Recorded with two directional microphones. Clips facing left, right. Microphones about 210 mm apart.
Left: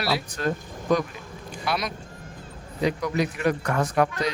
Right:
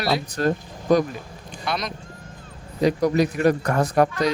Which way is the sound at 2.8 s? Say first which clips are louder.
Right 5 dB; 40° right (ahead or behind).